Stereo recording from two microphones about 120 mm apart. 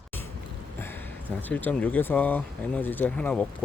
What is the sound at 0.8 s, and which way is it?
Speech, 15° left (ahead or behind).